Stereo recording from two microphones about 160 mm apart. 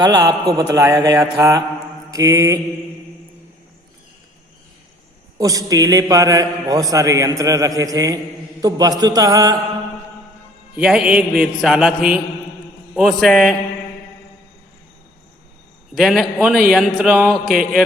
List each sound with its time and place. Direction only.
0.0 s a man's voice: 25° right (ahead or behind)
2.0 s mantra: 20° right (ahead or behind)
5.4 s a man's voice: 20° right (ahead or behind)
10.8 s a man's voice: 5° right (ahead or behind)
16.0 s a man's voice: centre (ahead or behind)